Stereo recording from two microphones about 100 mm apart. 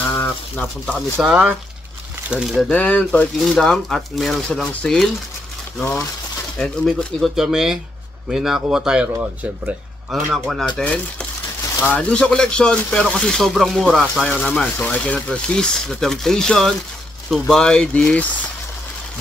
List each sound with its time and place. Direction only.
0.1 s a sound: 15° left (ahead or behind)
1.2 s speech: 10° right (ahead or behind)
2.7 s speech: 15° left (ahead or behind)
6.6 s speech: 5° left (ahead or behind); by 10.2 s 15° right (ahead or behind)
10.3 s speech: centre (ahead or behind)
10.8 s speech: 10° left (ahead or behind)